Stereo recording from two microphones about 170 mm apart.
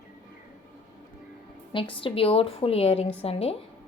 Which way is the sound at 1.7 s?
30° left (ahead or behind).